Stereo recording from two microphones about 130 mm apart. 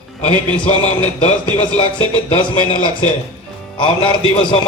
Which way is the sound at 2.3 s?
40° left (ahead or behind).